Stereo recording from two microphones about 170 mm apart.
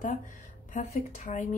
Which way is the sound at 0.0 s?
50° left (ahead or behind).